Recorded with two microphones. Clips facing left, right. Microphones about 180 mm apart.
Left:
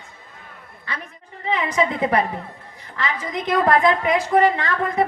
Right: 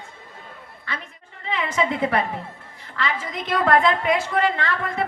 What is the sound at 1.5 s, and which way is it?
A woman's voice, 20° left (ahead or behind).